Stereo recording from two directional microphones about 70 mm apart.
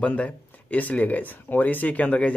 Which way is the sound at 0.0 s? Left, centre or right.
Centre.